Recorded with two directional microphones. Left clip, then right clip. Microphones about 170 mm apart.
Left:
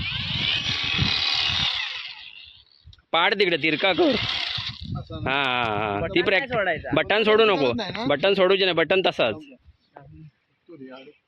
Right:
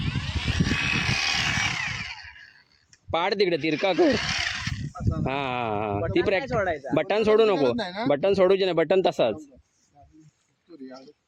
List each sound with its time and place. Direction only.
0.0 s vehicle: centre (ahead or behind)
1.5 s chainsaw: 10° right (ahead or behind)
3.1 s speech: 15° right (ahead or behind)
3.9 s a sound: centre (ahead or behind)
4.9 s speech: 10° right (ahead or behind)
6.6 s speech: 25° right (ahead or behind)
6.9 s speech: 10° right (ahead or behind)